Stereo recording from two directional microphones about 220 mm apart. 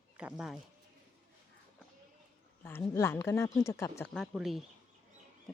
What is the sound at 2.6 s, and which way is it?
Speech, 10° left (ahead or behind).